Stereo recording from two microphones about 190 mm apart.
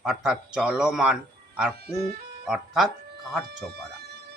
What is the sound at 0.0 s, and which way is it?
Speech, 5° right (ahead or behind).